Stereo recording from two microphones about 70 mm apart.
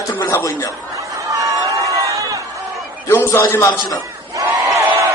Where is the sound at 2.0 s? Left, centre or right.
Right.